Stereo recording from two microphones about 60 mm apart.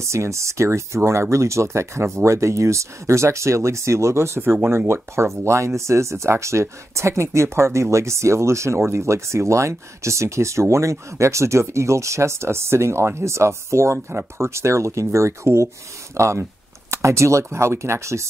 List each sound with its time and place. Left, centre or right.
0.0 s speech: right
4.4 s speech: right